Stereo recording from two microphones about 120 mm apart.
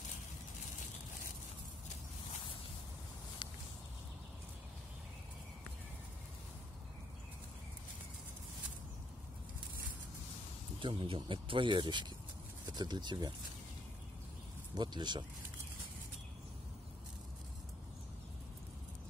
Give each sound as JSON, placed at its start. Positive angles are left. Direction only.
{"t": 10.8, "sound": "speech", "side_deg": -45}
{"t": 14.7, "sound": "speech", "side_deg": -40}